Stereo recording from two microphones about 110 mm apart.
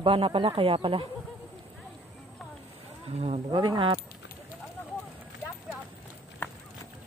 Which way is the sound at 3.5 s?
45° right (ahead or behind).